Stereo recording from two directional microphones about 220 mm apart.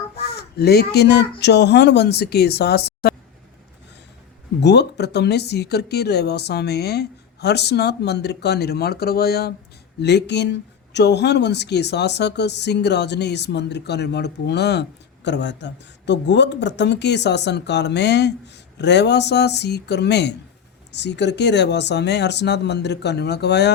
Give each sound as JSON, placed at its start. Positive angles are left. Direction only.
{"t": 0.2, "sound": "speech", "side_deg": 45}
{"t": 4.6, "sound": "speech", "side_deg": 50}